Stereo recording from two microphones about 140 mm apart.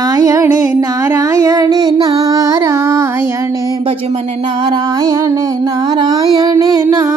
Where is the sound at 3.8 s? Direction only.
45° right (ahead or behind).